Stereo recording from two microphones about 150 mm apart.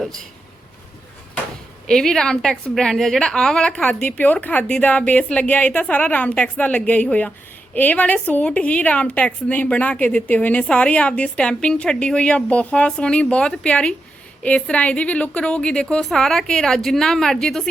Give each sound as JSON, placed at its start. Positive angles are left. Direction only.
{"t": 1.9, "sound": "a woman's voice", "side_deg": 5}